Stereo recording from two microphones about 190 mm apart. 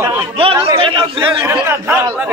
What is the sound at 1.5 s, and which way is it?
Speech, 15° right (ahead or behind).